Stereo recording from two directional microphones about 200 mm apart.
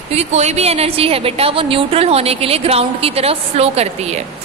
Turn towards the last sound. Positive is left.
turn(degrees=-30)  # may be behind; listen again after turning